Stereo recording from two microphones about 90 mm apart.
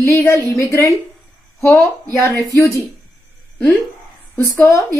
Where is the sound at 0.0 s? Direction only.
35° left (ahead or behind).